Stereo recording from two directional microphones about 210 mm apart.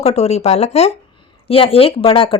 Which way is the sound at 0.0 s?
30° left (ahead or behind).